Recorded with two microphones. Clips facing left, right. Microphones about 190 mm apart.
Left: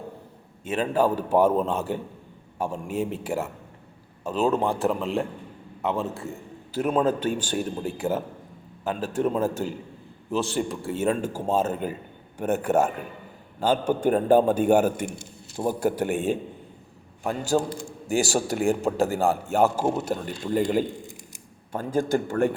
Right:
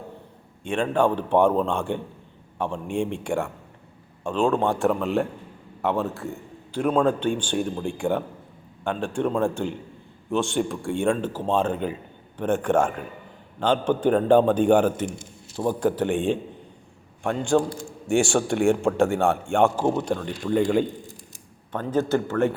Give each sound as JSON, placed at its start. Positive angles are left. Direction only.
{"t": 0.6, "sound": "a man's voice", "side_deg": 5}
{"t": 17.5, "sound": "a man's voice", "side_deg": 20}
{"t": 18.1, "sound": "a man's voice", "side_deg": 5}